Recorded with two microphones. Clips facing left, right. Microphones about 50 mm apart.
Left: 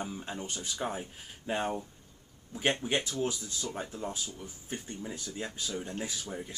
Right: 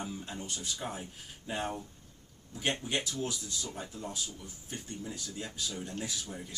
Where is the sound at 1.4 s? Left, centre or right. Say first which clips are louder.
Left 4 dB; left.